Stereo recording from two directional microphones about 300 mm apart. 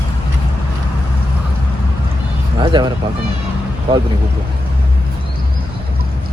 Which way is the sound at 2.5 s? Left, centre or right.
Centre.